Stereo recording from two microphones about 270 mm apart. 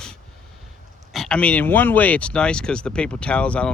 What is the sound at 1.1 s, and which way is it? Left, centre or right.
Speech, centre.